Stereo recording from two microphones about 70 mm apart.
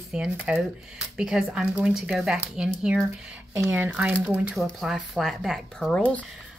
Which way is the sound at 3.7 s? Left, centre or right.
Right.